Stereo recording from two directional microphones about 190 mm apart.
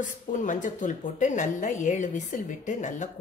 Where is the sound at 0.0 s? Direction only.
45° left (ahead or behind).